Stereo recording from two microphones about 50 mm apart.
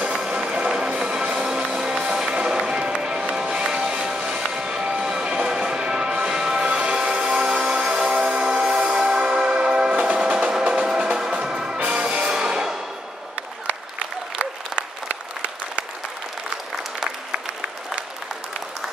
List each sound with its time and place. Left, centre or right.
0.3 s music: centre